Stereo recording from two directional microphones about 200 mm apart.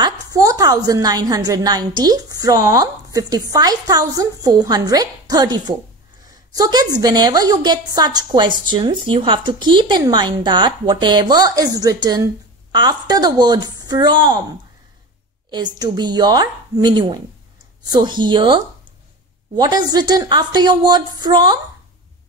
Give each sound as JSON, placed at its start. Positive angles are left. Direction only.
{"t": 0.0, "sound": "a woman's voice", "side_deg": -15}
{"t": 15.5, "sound": "a woman's voice", "side_deg": -20}